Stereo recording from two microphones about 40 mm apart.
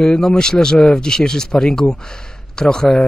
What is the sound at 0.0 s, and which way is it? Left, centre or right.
A man's voice, centre.